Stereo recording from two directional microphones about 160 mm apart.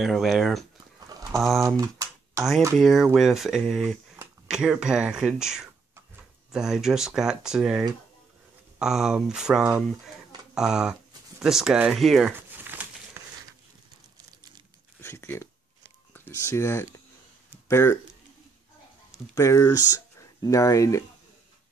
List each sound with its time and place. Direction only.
0.0 s speech: centre (ahead or behind)
1.8 s speech: 20° right (ahead or behind)
2.8 s speech: 5° right (ahead or behind)
12.3 s crumpling: 10° right (ahead or behind)
15.0 s a sound: 15° left (ahead or behind)
16.1 s speech: 15° left (ahead or behind)
19.1 s speech: 20° left (ahead or behind)